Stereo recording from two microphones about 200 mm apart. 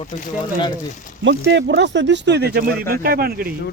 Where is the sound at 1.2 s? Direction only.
60° right (ahead or behind).